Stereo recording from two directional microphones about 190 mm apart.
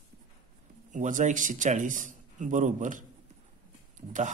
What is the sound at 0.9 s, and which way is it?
Speech, 40° right (ahead or behind).